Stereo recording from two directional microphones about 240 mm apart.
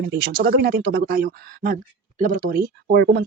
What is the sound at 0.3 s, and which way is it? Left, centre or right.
Speech, right.